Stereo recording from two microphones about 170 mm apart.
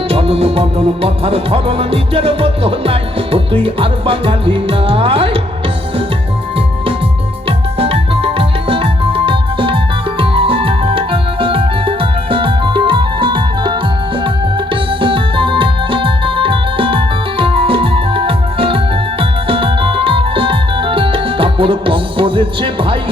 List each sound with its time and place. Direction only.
0.1 s music: 35° right (ahead or behind)
7.4 s music: 35° right (ahead or behind)